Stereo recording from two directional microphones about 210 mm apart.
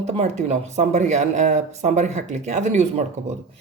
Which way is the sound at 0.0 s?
30° right (ahead or behind).